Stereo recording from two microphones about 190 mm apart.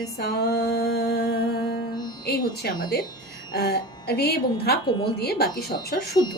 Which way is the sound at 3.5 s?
55° left (ahead or behind).